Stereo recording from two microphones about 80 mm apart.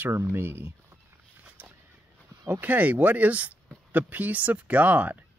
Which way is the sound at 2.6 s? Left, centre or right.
Right.